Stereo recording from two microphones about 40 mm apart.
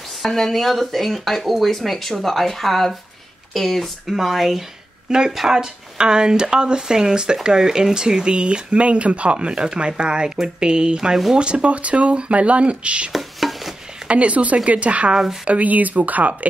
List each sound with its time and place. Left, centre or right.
0.2 s speech: centre; by 13.1 s right
13.1 s a sound: centre
14.0 s speech: right